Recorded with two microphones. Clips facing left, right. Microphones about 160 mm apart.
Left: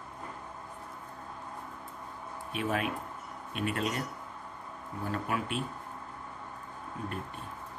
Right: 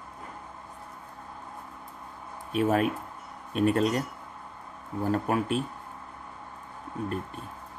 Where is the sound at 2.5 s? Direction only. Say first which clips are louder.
Right 8 dB; 40° right (ahead or behind).